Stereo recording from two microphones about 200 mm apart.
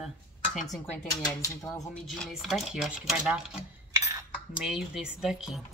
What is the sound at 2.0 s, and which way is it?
Speech, centre (ahead or behind).